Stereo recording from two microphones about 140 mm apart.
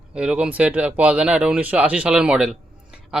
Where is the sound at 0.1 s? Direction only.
10° right (ahead or behind).